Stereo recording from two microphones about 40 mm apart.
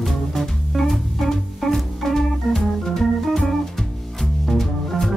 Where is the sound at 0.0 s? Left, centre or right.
Centre.